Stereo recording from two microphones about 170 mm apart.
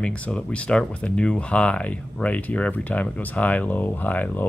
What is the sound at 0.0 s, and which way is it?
Speech, 5° left (ahead or behind).